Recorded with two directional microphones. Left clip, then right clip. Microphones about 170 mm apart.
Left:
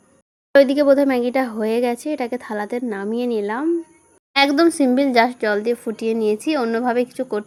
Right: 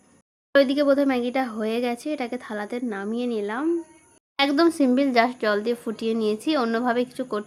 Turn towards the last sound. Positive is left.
turn(degrees=15)  # may be behind; listen again after turning